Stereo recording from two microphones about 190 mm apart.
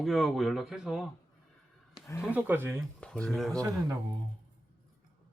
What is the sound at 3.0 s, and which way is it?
Speech, 5° left (ahead or behind).